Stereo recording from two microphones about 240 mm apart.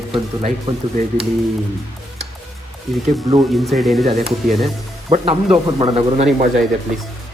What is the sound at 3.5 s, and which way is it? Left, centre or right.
Speech, centre.